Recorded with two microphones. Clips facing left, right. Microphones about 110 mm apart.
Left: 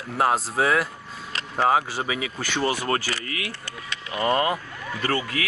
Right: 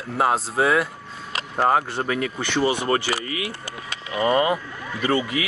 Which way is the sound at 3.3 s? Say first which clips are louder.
Right 3 dB; 10° right (ahead or behind).